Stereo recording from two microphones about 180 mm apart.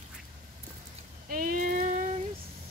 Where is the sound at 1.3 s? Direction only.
50° right (ahead or behind).